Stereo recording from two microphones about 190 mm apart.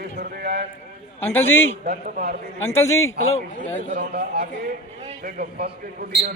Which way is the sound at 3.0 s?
90° left.